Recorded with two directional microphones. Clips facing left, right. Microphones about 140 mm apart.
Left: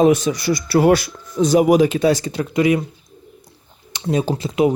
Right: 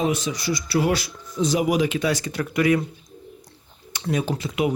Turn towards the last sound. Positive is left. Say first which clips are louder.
# left 6 dB
turn(degrees=30)  # may be behind; listen again after turning